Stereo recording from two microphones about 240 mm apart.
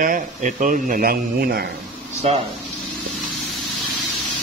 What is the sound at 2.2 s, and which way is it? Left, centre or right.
Speech, right.